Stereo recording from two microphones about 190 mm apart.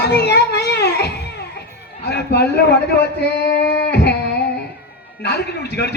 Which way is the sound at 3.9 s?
60° left (ahead or behind).